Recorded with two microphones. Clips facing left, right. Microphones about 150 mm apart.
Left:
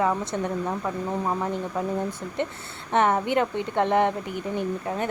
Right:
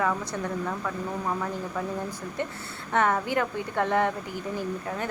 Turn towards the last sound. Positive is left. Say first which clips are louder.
# left 4 dB
turn(degrees=20)  # may be behind; listen again after turning